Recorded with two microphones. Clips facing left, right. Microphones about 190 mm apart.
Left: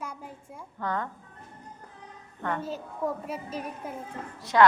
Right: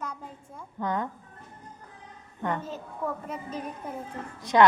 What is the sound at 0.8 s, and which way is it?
Speech, 15° right (ahead or behind).